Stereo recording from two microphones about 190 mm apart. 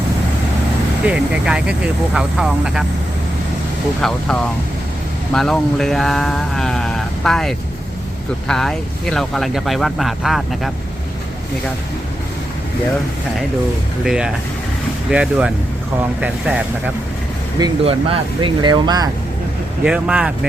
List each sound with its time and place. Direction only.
1.0 s speech: 5° right (ahead or behind)
4.0 s speech: 5° left (ahead or behind)
14.0 s speech: 5° right (ahead or behind)
17.6 s speech: 25° right (ahead or behind)
19.8 s speech: 5° right (ahead or behind)